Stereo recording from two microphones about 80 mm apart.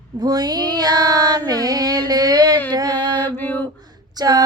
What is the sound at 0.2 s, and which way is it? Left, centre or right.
Child singing, right.